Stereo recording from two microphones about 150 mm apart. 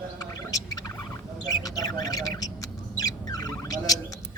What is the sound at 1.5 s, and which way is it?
Bird, 25° left (ahead or behind).